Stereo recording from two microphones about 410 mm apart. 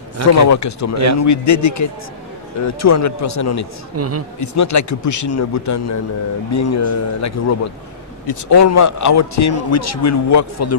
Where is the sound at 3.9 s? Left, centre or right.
Right.